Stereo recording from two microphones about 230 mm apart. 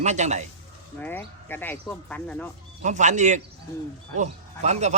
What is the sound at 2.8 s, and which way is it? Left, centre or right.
A man's voice, right.